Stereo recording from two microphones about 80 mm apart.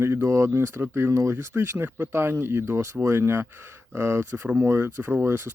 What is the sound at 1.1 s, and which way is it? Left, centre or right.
Speech, right.